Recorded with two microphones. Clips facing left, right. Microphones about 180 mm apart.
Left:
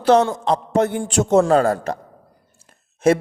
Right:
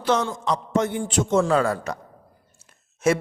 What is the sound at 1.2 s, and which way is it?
Speech, 40° left (ahead or behind).